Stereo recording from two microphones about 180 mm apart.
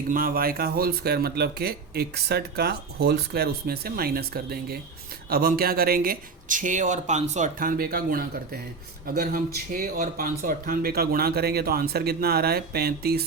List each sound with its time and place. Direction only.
0.1 s speech: 55° right (ahead or behind)